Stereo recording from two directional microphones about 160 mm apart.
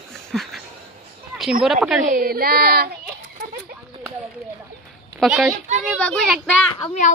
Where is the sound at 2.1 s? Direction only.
65° right (ahead or behind).